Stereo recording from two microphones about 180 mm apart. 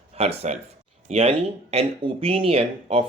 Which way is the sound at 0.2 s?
35° right (ahead or behind).